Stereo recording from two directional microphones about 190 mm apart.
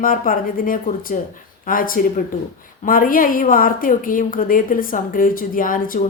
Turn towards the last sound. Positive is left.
turn(degrees=45)  # may be behind; listen again after turning